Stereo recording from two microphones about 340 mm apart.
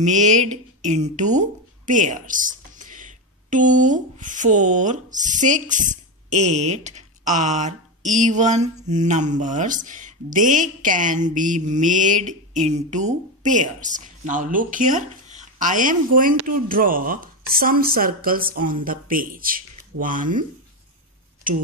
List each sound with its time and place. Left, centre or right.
0.0 s speech: right